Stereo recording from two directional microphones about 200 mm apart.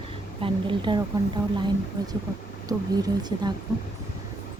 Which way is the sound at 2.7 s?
20° right (ahead or behind).